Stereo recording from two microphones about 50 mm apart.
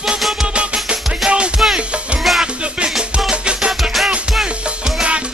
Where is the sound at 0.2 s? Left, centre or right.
Centre.